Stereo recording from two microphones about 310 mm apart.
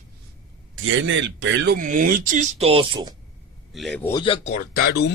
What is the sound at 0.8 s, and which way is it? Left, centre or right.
Speech, right.